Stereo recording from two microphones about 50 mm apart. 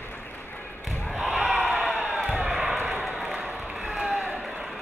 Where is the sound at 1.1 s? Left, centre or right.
Centre.